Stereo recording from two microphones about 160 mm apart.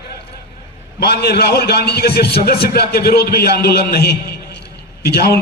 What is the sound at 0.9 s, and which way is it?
A man's voice, 90° left.